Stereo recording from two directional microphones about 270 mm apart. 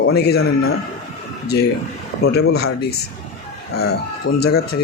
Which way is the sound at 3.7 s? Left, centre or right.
Left.